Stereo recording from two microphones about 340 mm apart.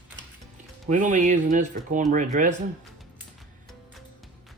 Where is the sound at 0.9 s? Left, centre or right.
Right.